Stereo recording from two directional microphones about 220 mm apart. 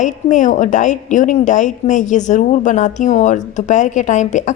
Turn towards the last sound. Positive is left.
turn(degrees=35)  # may be behind; listen again after turning